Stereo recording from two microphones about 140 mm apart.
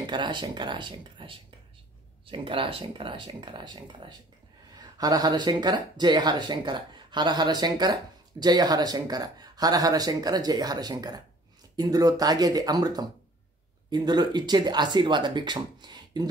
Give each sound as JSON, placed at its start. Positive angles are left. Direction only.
{"t": 0.0, "sound": "speech", "side_deg": -35}
{"t": 2.3, "sound": "speech", "side_deg": -40}